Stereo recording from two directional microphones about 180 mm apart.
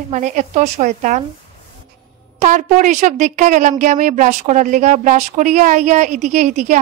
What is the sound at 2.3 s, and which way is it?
A woman's voice, 45° right (ahead or behind).